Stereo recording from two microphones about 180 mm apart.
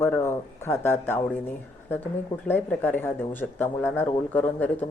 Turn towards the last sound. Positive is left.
turn(degrees=10)  # may be behind; listen again after turning